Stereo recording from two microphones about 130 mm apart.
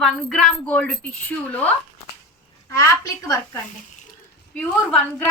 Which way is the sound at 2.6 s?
25° left (ahead or behind).